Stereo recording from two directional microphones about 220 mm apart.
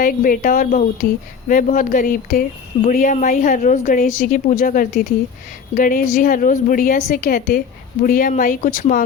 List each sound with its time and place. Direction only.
0.0 s speech: 40° left (ahead or behind)